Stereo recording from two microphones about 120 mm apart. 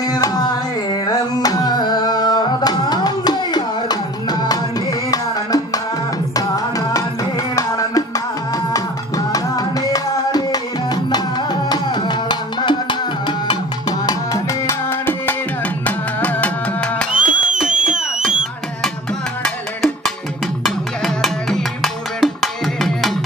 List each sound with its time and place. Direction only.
0.1 s carnatic music: 35° left (ahead or behind)
1.0 s music: 35° left (ahead or behind)
6.3 s music: 30° left (ahead or behind)
9.3 s music: 30° left (ahead or behind)
11.7 s music: 35° left (ahead or behind)
14.7 s music: 20° left (ahead or behind)
17.1 s music: 10° right (ahead or behind)
20.6 s music: centre (ahead or behind)